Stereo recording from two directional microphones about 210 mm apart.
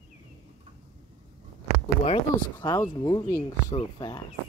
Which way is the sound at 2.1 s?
20° left (ahead or behind).